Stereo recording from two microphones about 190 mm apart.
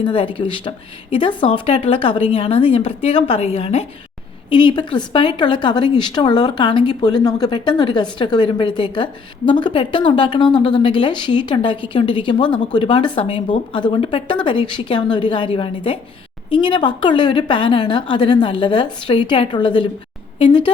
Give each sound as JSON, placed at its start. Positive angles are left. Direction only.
{"t": 0.0, "sound": "a woman's voice", "side_deg": 25}